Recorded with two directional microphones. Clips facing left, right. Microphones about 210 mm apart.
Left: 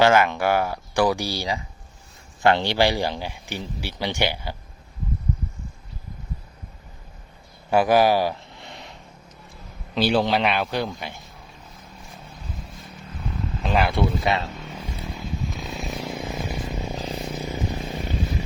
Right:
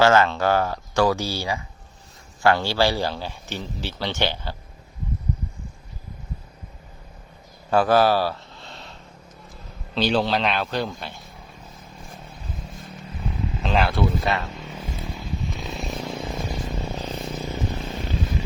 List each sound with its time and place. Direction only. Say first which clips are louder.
0.0 s speech: even; 15° left (ahead or behind)
7.7 s a sound: even; 15° left (ahead or behind)
9.9 s speech: left 1 dB; 10° left (ahead or behind)
13.6 s speech: even; 10° left (ahead or behind)
13.9 s speech: left 1 dB; 25° left (ahead or behind)
14.5 s vehicle: right 1 dB; centre (ahead or behind)